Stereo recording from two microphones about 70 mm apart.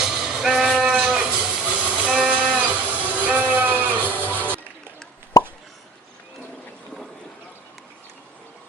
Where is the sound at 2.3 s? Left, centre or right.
Right.